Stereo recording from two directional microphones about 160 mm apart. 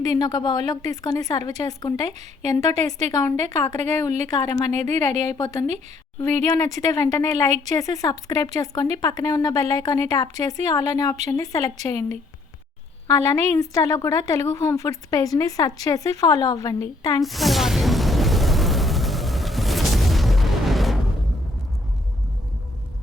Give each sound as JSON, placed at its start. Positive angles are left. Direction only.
{"t": 0.0, "sound": "speech", "side_deg": 25}
{"t": 2.1, "sound": "a woman's voice", "side_deg": -45}
{"t": 6.4, "sound": "speech", "side_deg": 20}
{"t": 13.1, "sound": "speech", "side_deg": 20}
{"t": 17.2, "sound": "a sound", "side_deg": 0}